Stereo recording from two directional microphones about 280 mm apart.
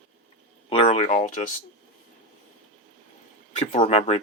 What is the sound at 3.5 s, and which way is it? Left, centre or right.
Speech, left.